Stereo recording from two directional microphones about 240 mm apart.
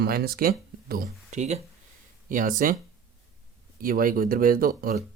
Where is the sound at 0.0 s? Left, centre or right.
Right.